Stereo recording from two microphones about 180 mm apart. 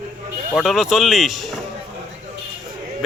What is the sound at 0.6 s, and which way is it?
Speech, centre (ahead or behind).